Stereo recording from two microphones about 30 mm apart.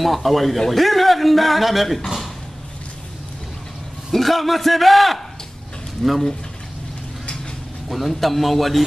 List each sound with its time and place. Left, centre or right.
0.0 s a man's voice: centre
4.1 s a man's voice: centre
6.0 s speech: left
7.9 s a man's voice: centre